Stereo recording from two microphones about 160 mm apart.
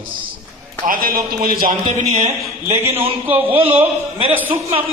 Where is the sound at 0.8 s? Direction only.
60° right (ahead or behind).